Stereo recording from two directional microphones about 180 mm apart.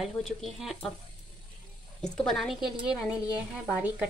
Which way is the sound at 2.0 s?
5° left (ahead or behind).